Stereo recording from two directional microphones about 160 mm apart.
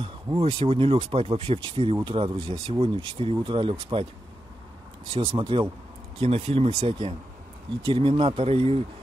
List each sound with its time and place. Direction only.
0.0 s speech: 35° right (ahead or behind)
5.1 s speech: 35° right (ahead or behind)